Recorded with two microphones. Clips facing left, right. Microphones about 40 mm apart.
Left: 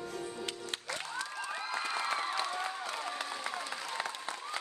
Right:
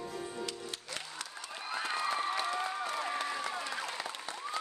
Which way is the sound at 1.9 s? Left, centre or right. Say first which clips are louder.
Right 2 dB; left.